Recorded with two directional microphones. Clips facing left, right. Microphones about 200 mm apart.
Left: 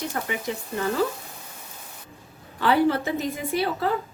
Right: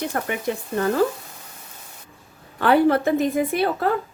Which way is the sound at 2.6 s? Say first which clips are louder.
Right 4 dB; 55° right (ahead or behind).